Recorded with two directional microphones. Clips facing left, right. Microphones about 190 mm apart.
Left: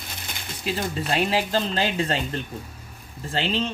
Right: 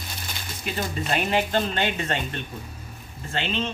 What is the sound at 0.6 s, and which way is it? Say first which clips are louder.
Speech: left 2 dB; 30° left (ahead or behind).